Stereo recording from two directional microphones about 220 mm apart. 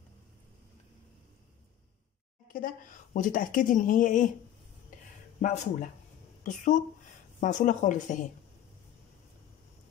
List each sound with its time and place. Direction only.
2.4 s speech: 40° left (ahead or behind)
5.4 s speech: 35° left (ahead or behind)